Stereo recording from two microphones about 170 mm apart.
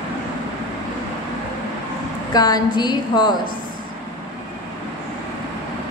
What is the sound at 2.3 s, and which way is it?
A woman's voice, 25° left (ahead or behind).